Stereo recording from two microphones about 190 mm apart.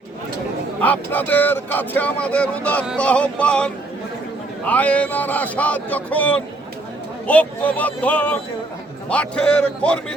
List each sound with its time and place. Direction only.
0.8 s a man's voice: 10° left (ahead or behind)